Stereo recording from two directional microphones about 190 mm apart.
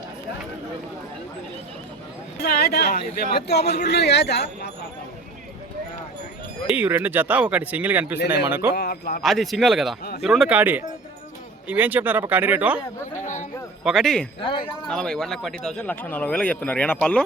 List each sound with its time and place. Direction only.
2.4 s speech: 55° left (ahead or behind)
6.7 s speech: 10° right (ahead or behind)
8.7 s a man's voice: 55° left (ahead or behind)
9.2 s speech: centre (ahead or behind)
13.1 s speech: 40° left (ahead or behind)
13.8 s speech: centre (ahead or behind)